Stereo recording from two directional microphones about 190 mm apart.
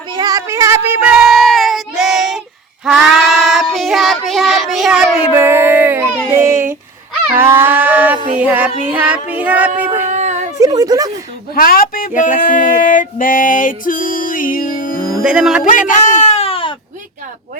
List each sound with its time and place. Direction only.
0.1 s child singing: 20° right (ahead or behind)
7.3 s livestock: 10° right (ahead or behind)
8.4 s child singing: 10° right (ahead or behind)
10.1 s a sound: 40° right (ahead or behind)
10.6 s speech: 20° right (ahead or behind)
11.5 s music: 50° left (ahead or behind)
15.2 s speech: 5° right (ahead or behind)
15.9 s baby cry: 40° left (ahead or behind)